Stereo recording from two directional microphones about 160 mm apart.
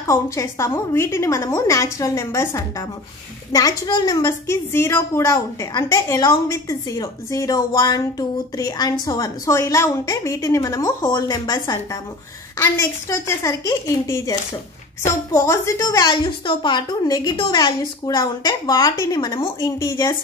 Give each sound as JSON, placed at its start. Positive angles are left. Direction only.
{"t": 0.0, "sound": "a woman's voice", "side_deg": 20}